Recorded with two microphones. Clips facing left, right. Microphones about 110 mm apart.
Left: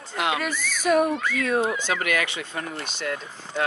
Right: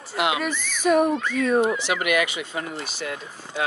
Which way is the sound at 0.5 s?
15° right (ahead or behind).